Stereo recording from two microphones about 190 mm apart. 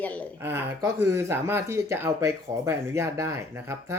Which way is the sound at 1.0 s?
15° right (ahead or behind).